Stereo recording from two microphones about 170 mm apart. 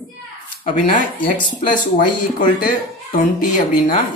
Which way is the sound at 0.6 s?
55° left (ahead or behind).